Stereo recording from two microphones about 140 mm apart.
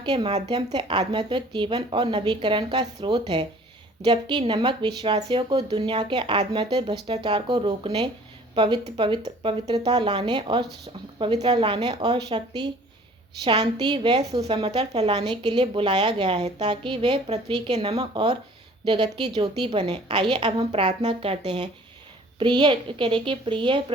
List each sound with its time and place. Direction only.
0.0 s speech: 35° right (ahead or behind)
20.7 s speech: 45° right (ahead or behind)